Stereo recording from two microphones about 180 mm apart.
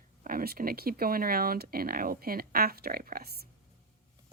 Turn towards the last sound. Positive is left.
turn(degrees=-55)  # may be behind; listen again after turning